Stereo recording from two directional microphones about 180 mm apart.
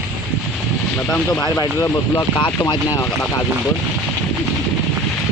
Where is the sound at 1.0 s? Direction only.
5° left (ahead or behind).